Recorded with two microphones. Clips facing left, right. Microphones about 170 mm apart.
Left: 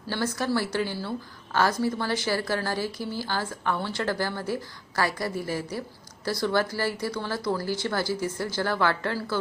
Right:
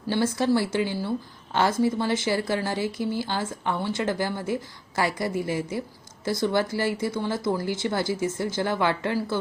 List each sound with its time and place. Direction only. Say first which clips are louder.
0.1 s speech: right 4 dB; 25° right (ahead or behind)